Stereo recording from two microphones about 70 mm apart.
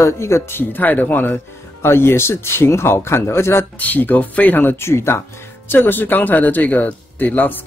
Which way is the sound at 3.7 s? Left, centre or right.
Left.